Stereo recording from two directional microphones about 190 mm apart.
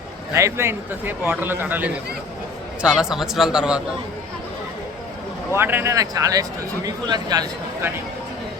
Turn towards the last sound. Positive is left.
turn(degrees=-15)  # may be behind; listen again after turning